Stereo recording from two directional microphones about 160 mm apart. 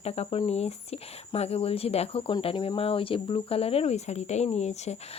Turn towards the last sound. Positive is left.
turn(degrees=45)  # may be behind; listen again after turning